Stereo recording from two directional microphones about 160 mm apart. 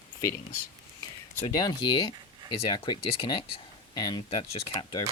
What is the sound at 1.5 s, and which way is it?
Speech, 25° left (ahead or behind).